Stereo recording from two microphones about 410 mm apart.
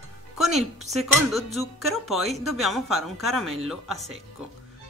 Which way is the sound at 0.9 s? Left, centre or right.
Centre.